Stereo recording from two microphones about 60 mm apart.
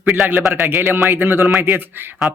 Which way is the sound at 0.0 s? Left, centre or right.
Centre.